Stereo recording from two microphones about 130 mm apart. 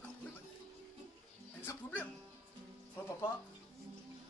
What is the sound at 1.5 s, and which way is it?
Speech, 15° left (ahead or behind).